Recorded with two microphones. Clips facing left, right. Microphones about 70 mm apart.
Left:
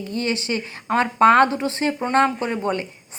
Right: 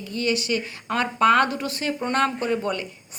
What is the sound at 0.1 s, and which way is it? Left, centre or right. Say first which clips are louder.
A woman's voice: right 1 dB; left.